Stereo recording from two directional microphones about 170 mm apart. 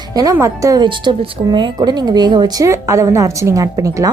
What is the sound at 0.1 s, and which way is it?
A woman's voice, 20° right (ahead or behind).